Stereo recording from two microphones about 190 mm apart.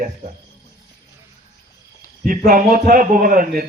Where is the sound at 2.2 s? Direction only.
45° right (ahead or behind).